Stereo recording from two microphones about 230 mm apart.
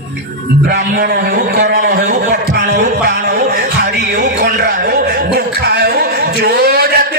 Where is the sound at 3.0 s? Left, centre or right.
Right.